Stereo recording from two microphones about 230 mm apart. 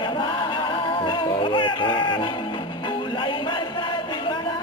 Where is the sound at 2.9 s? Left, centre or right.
Left.